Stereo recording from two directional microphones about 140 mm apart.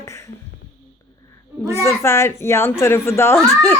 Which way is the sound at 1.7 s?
20° left (ahead or behind).